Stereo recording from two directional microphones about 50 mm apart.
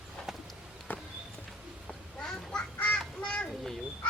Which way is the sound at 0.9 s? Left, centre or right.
Left.